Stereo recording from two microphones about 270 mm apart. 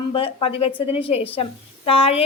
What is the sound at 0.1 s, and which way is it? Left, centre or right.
A woman's voice, centre.